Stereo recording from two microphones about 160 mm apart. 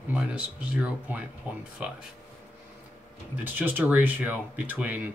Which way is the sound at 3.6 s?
10° right (ahead or behind).